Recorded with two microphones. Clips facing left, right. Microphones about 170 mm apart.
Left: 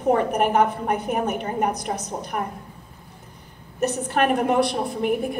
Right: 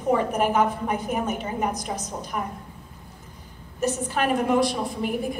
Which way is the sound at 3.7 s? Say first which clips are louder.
Left 3 dB; 60° left (ahead or behind).